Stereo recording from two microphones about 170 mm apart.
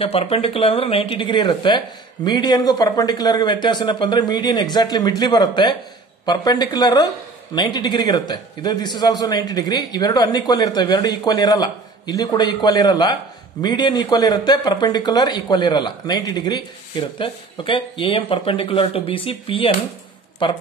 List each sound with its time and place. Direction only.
0.0 s a man's voice: 35° left (ahead or behind)